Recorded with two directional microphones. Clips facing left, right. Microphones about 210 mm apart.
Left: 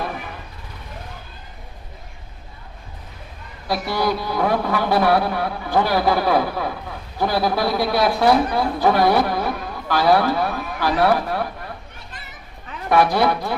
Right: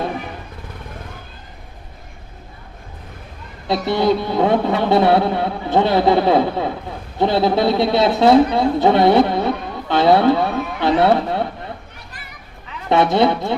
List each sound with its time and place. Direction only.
3.7 s a man's voice: 25° right (ahead or behind)
12.9 s a man's voice: 25° right (ahead or behind)